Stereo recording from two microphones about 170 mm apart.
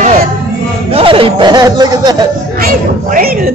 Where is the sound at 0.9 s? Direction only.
35° right (ahead or behind).